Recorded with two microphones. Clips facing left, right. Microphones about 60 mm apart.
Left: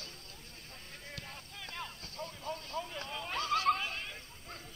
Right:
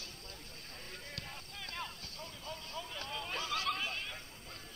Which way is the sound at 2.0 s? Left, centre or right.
Left.